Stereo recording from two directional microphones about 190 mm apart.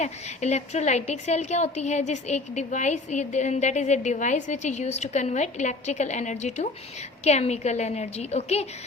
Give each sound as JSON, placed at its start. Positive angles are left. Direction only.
{"t": 0.0, "sound": "a woman's voice", "side_deg": 35}